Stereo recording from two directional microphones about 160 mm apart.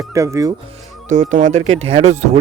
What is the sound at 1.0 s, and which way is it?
Speech, 50° right (ahead or behind).